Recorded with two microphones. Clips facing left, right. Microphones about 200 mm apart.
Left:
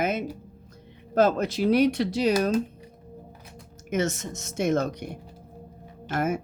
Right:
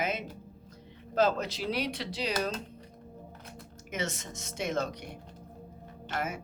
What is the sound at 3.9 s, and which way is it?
Speech, 45° left (ahead or behind).